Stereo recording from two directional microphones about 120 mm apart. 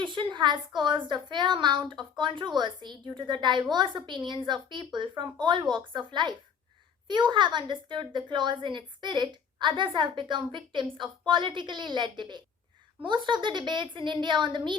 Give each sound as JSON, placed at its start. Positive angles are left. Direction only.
{"t": 0.0, "sound": "a woman's voice", "side_deg": -40}